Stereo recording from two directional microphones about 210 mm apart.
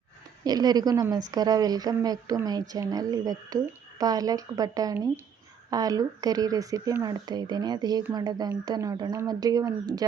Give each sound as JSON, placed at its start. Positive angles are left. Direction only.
{"t": 0.4, "sound": "speech", "side_deg": -20}